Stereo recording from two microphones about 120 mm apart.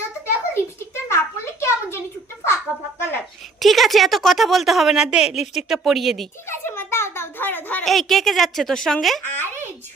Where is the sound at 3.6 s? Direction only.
Centre (ahead or behind).